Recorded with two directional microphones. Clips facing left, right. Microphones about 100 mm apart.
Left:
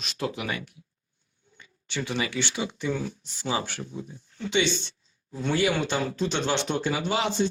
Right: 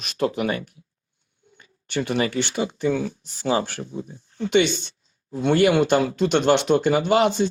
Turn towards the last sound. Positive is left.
turn(degrees=-50)  # may be behind; listen again after turning